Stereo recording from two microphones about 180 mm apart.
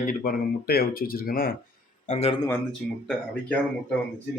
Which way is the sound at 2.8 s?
5° left (ahead or behind).